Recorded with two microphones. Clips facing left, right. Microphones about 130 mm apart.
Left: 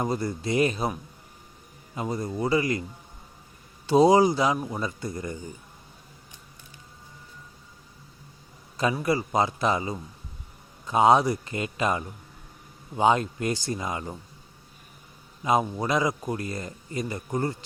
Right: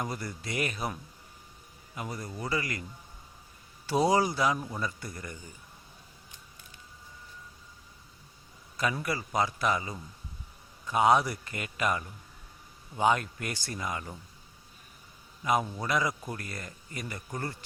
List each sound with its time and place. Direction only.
0.0 s speech: 25° left (ahead or behind)
2.0 s speech: 25° left (ahead or behind)
3.8 s speech: 20° left (ahead or behind)
8.8 s speech: 25° left (ahead or behind)
15.4 s speech: 20° left (ahead or behind)